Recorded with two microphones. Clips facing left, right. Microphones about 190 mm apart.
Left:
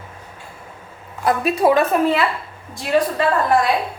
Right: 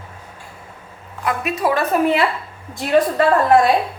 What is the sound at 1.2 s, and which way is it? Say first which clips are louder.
Speech: left 4 dB; 35° left (ahead or behind).